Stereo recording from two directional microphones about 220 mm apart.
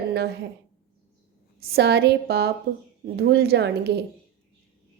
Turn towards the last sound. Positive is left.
turn(degrees=-50)  # may be behind; listen again after turning